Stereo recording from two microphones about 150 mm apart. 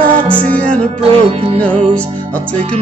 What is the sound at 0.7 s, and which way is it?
Music, 40° right (ahead or behind).